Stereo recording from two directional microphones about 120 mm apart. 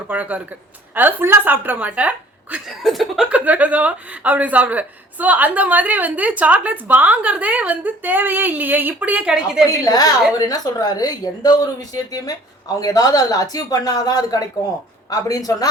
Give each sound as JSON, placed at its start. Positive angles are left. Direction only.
{"t": 0.1, "sound": "a woman's voice", "side_deg": -15}
{"t": 9.8, "sound": "speech", "side_deg": 30}